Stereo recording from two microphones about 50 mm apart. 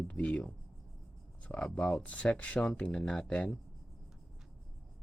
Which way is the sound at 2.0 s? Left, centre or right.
Left.